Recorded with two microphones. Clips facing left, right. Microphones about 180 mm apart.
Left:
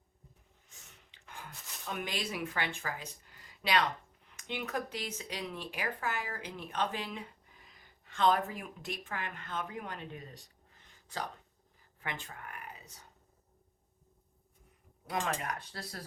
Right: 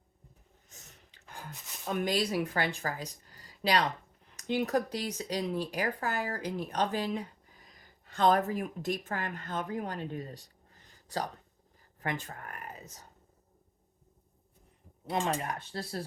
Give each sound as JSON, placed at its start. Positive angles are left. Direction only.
{"t": 0.7, "sound": "a sound", "side_deg": -40}
{"t": 4.4, "sound": "speech", "side_deg": -40}
{"t": 15.0, "sound": "speech", "side_deg": -25}